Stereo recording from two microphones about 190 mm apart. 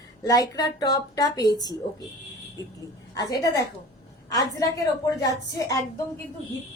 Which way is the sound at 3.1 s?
20° left (ahead or behind).